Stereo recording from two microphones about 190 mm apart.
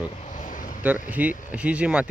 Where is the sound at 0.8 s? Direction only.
10° right (ahead or behind).